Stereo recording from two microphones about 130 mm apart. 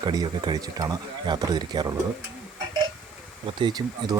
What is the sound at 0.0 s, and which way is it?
Speech, 30° right (ahead or behind).